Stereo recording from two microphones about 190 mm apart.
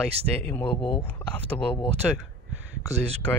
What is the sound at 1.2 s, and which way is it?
Speech, 5° left (ahead or behind).